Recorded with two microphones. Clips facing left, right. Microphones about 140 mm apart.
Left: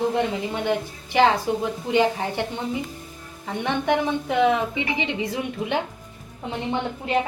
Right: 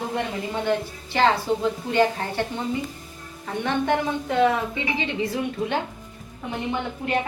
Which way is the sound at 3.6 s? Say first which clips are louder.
Left 1 dB; 15° left (ahead or behind).